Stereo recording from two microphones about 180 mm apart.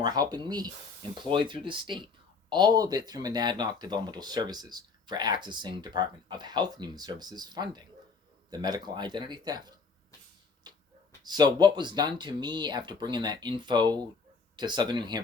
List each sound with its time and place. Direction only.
0.0 s speech: 20° right (ahead or behind)
10.6 s a sound: 25° right (ahead or behind)
11.2 s speech: 25° right (ahead or behind)